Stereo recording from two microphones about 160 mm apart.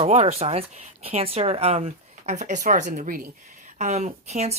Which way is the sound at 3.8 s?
45° right (ahead or behind).